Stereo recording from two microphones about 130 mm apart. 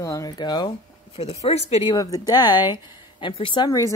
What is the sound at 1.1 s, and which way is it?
Speech, 50° left (ahead or behind).